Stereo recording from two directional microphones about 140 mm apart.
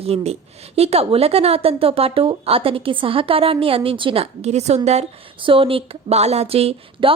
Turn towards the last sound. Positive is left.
turn(degrees=-40)  # may be behind; listen again after turning